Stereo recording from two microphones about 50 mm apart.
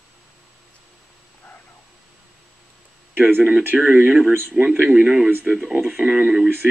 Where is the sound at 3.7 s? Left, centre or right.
Right.